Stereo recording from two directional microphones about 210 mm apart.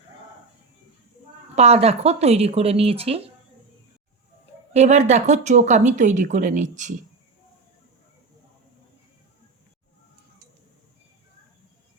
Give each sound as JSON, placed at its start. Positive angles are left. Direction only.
{"t": 1.5, "sound": "speech", "side_deg": -30}
{"t": 4.7, "sound": "speech", "side_deg": -30}